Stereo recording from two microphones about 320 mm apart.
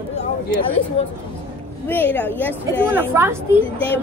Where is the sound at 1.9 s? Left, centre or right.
Centre.